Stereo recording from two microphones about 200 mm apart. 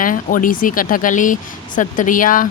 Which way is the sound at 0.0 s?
45° left (ahead or behind).